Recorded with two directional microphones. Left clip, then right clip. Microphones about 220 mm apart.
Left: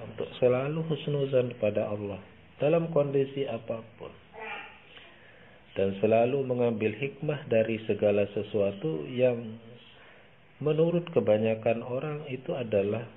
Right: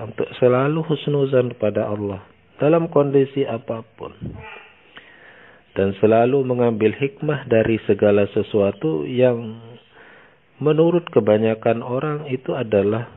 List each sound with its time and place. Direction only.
0.1 s a man's voice: 40° right (ahead or behind)
5.7 s a man's voice: 45° right (ahead or behind)
10.6 s a man's voice: 45° right (ahead or behind)